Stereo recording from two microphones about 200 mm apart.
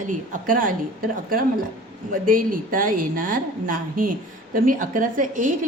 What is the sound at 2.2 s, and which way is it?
A woman's voice, 45° right (ahead or behind).